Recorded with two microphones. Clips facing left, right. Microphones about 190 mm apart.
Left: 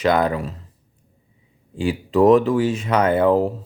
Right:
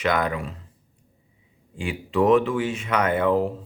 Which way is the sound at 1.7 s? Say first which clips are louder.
Left 6 dB; 35° left (ahead or behind).